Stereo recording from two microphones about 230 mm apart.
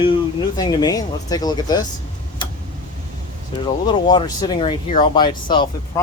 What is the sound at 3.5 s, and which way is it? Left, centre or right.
Speech, left.